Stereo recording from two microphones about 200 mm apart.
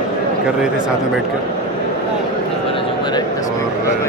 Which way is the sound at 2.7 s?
20° left (ahead or behind).